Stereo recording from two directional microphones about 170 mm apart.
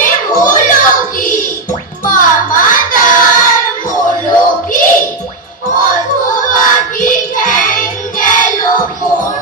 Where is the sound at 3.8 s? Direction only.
55° left (ahead or behind).